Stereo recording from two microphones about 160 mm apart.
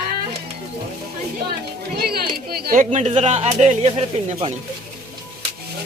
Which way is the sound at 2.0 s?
75° right (ahead or behind).